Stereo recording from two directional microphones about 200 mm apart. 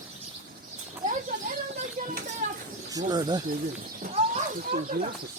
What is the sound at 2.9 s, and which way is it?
Speech, 20° right (ahead or behind).